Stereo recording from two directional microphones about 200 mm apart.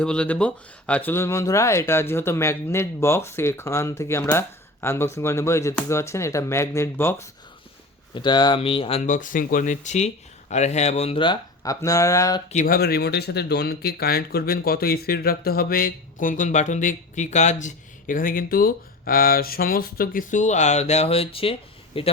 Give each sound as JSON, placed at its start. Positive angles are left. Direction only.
{"t": 0.0, "sound": "speech", "side_deg": 5}
{"t": 8.1, "sound": "speech", "side_deg": 20}
{"t": 12.5, "sound": "speech", "side_deg": 40}